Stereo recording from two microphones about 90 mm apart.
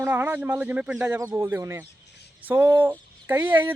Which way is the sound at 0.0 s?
25° right (ahead or behind).